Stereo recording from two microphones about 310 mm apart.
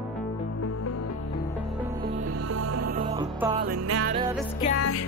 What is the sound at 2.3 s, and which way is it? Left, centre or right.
Music, right.